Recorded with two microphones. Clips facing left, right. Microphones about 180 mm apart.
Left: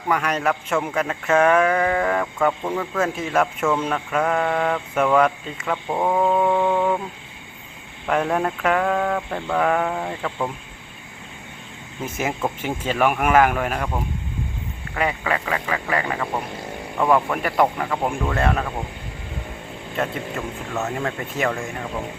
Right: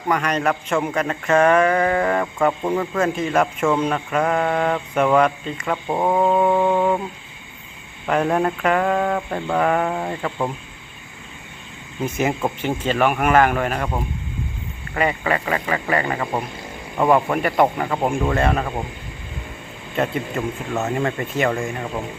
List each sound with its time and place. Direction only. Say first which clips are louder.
0.1 s speech: right 1 dB; 5° left (ahead or behind)
2.9 s speech: even; centre (ahead or behind)
8.0 s speech: right 2 dB; centre (ahead or behind)
12.0 s speech: right 3 dB; 5° left (ahead or behind)
17.0 s speech: right 2 dB; 15° right (ahead or behind)
17.3 s speech: right 2 dB; 5° right (ahead or behind)
20.0 s speech: right 3 dB; centre (ahead or behind)
20.4 s speech: right 6 dB; 15° right (ahead or behind)
21.0 s speech: right 3 dB; centre (ahead or behind)